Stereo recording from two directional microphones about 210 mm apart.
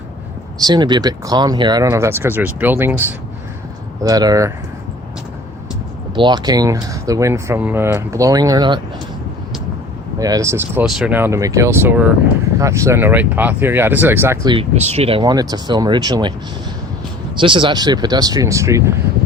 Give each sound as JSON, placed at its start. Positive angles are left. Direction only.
{"t": 0.6, "sound": "speech", "side_deg": -20}
{"t": 6.1, "sound": "speech", "side_deg": -20}
{"t": 10.2, "sound": "speech", "side_deg": -15}
{"t": 14.5, "sound": "speech", "side_deg": -30}
{"t": 17.4, "sound": "speech", "side_deg": -25}